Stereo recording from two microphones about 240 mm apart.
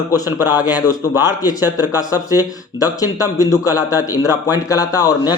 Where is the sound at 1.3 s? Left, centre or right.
Centre.